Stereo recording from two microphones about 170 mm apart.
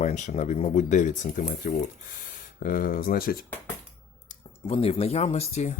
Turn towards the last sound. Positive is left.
turn(degrees=40)  # may be behind; listen again after turning